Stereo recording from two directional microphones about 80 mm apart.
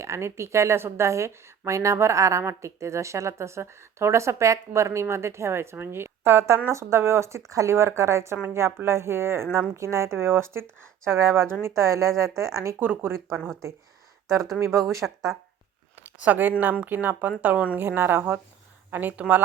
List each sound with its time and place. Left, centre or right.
0.0 s a woman's voice: right
12.8 s speech: right
14.6 s a woman's voice: right
16.2 s speech: right